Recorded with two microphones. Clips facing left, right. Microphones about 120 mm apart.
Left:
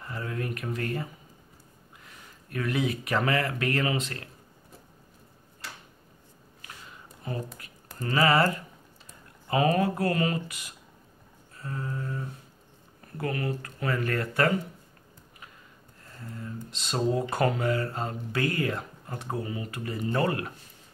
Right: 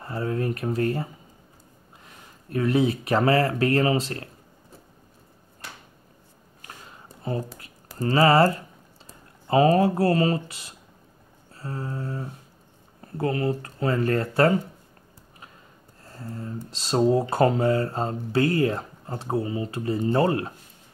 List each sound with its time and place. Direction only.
0.0 s speech: 30° right (ahead or behind)
2.5 s speech: 30° right (ahead or behind)
7.3 s speech: 30° right (ahead or behind)
11.5 s a sound: 30° right (ahead or behind)
13.0 s speech: 30° right (ahead or behind)
16.0 s speech: 35° right (ahead or behind)